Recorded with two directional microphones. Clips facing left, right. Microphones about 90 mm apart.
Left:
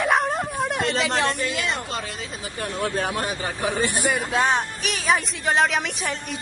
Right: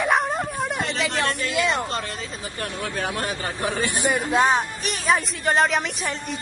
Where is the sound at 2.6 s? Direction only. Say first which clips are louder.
Left 3 dB; 25° left (ahead or behind).